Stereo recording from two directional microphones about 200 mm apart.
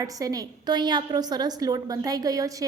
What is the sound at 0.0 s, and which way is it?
A woman's voice, 15° right (ahead or behind).